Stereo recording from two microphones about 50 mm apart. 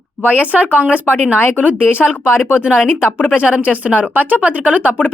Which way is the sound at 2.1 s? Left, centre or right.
Centre.